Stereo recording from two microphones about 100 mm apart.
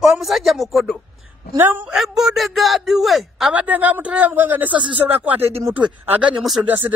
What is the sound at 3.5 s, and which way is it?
Speech, 15° right (ahead or behind).